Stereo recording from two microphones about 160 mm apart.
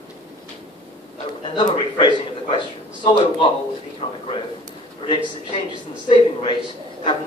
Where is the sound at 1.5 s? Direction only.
30° left (ahead or behind).